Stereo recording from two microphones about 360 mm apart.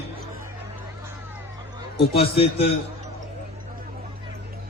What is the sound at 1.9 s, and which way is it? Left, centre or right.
Speech, centre.